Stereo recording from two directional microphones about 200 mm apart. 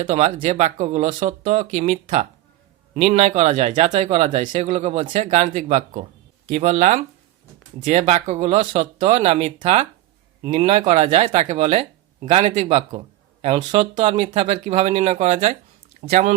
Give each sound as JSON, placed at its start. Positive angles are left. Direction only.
{"t": 0.0, "sound": "speech", "side_deg": -35}